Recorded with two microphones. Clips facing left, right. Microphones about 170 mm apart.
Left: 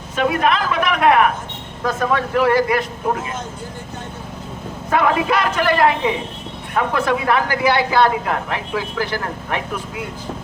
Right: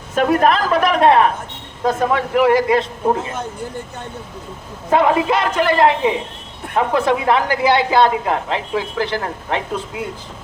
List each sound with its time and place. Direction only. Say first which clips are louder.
0.2 s speech: right 3 dB; 40° right (ahead or behind)
1.8 s speech: right 2 dB; 20° right (ahead or behind)
4.9 s speech: right 3 dB; 25° right (ahead or behind)